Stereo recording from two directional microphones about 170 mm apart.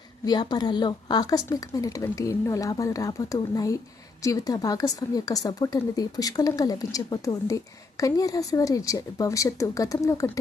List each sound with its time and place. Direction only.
0.3 s a woman's voice: 25° left (ahead or behind)